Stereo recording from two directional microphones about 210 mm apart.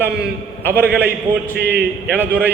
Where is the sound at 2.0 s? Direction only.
10° right (ahead or behind).